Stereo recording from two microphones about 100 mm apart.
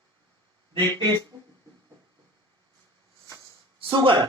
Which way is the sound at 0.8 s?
45° right (ahead or behind).